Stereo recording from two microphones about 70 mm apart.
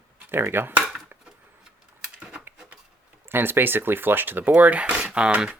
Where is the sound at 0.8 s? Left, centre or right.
Centre.